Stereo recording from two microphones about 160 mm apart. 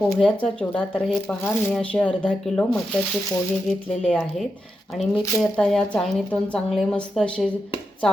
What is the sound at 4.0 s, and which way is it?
Speech, 5° left (ahead or behind).